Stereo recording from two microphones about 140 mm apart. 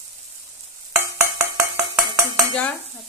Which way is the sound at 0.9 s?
20° right (ahead or behind).